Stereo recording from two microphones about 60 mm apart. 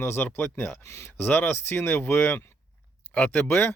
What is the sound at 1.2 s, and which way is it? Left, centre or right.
Speech, left.